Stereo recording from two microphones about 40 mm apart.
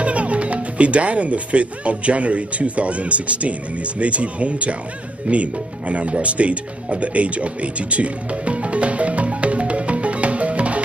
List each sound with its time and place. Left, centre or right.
0.0 s speech: right
5.3 s music: right